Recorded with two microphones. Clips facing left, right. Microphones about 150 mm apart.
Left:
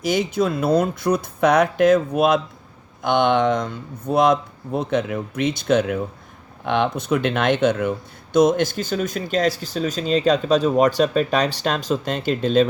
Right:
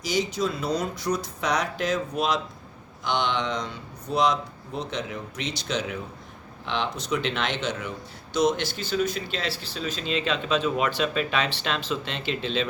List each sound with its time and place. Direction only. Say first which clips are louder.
0.0 s speech: left 6 dB; 55° left (ahead or behind)